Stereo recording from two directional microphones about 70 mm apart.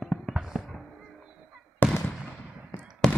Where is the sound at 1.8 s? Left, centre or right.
Left.